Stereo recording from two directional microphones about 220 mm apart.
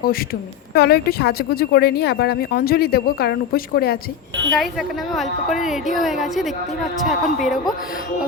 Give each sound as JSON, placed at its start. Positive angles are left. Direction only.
{"t": 0.7, "sound": "speech", "side_deg": 45}
{"t": 4.5, "sound": "a woman's voice", "side_deg": 0}